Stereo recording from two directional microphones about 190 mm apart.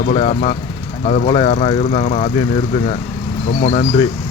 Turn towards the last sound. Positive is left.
turn(degrees=35)  # may be behind; listen again after turning